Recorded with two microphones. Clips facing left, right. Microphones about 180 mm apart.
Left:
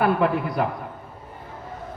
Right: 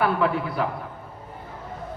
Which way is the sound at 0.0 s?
45° left (ahead or behind).